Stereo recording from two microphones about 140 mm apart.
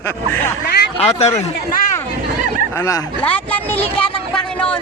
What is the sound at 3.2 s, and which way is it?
Speech, 10° left (ahead or behind).